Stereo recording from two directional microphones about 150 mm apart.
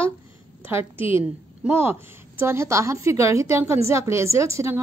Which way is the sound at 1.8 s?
15° right (ahead or behind).